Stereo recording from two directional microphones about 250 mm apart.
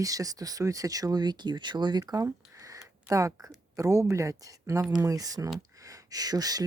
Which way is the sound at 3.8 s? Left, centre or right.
Centre.